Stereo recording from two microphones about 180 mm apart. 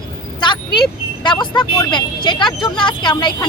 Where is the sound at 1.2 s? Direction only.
25° left (ahead or behind).